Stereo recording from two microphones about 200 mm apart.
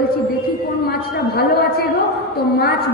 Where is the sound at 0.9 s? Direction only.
50° left (ahead or behind).